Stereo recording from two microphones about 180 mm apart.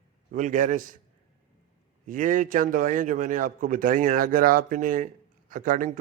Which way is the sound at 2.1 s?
45° right (ahead or behind).